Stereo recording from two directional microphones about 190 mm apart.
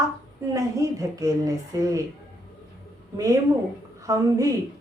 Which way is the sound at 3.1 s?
20° right (ahead or behind).